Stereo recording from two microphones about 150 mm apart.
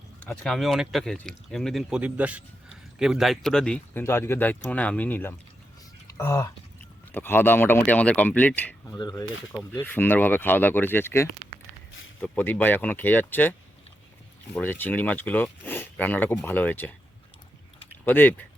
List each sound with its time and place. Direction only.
0.4 s speech: centre (ahead or behind)
4.0 s speech: 15° left (ahead or behind)
9.0 s speech: 30° left (ahead or behind)
9.8 s speech: 15° left (ahead or behind)
18.0 s speech: 10° left (ahead or behind)